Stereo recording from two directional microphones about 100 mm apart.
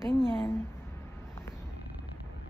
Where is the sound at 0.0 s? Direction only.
5° right (ahead or behind).